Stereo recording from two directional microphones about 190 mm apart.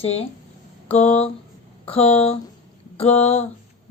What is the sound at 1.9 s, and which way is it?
Speech, 30° left (ahead or behind).